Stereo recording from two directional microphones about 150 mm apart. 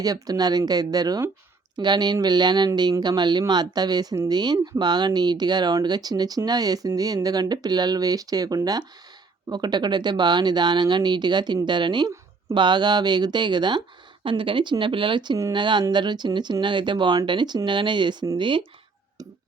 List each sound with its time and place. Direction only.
0.0 s speech: 25° right (ahead or behind)